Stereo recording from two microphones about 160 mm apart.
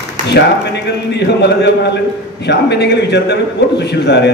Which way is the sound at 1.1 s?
90° left.